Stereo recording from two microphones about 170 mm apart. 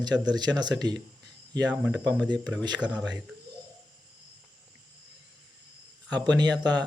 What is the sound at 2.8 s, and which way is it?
Speech, 5° right (ahead or behind).